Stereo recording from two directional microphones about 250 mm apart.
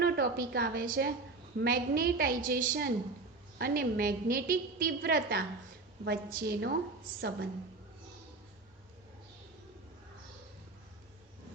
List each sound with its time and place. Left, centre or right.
0.0 s a woman's voice: right